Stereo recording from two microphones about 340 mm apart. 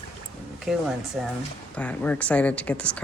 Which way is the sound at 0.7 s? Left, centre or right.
Centre.